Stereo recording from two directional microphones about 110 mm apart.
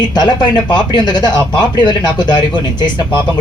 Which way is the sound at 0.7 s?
40° left (ahead or behind).